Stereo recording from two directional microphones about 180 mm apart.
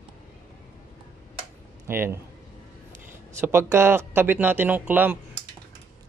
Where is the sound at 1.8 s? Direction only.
15° right (ahead or behind).